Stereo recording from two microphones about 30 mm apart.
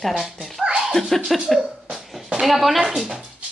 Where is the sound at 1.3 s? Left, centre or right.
Centre.